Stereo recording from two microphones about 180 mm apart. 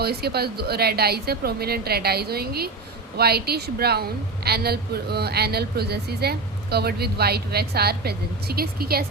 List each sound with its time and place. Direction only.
0.0 s speech: 60° right (ahead or behind)